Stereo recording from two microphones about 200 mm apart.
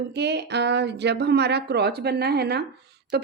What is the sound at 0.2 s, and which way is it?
Speech, 60° right (ahead or behind).